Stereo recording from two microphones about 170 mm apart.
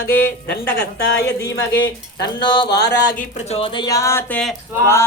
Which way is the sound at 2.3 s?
30° left (ahead or behind).